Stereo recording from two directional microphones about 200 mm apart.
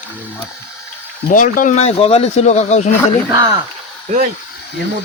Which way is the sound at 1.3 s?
40° left (ahead or behind).